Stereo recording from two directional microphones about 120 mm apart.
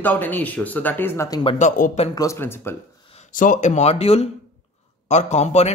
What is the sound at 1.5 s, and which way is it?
Speech, 90° left.